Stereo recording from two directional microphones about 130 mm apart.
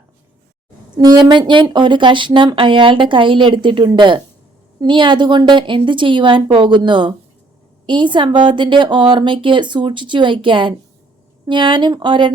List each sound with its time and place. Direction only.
0.9 s speech: 30° right (ahead or behind)